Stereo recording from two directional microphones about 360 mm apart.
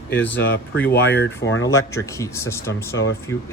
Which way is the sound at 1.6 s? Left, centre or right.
Centre.